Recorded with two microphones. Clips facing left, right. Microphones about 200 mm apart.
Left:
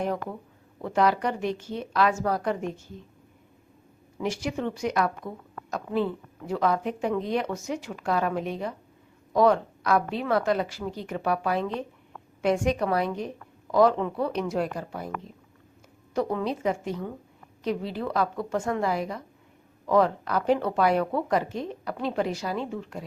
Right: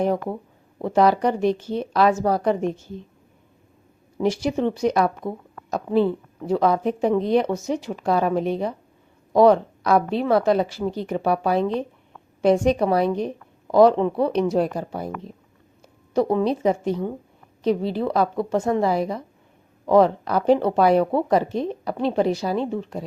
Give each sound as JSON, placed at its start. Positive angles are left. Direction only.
{"t": 0.0, "sound": "speech", "side_deg": -35}
{"t": 4.2, "sound": "speech", "side_deg": -35}
{"t": 16.1, "sound": "a woman's voice", "side_deg": -30}